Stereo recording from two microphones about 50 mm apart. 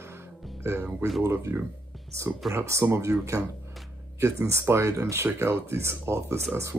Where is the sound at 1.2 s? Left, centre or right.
Right.